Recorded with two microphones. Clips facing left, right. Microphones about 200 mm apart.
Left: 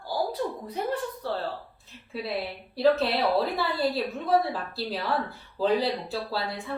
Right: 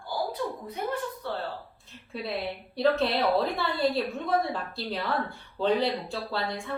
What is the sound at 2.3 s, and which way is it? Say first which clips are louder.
A woman's voice: even; centre (ahead or behind).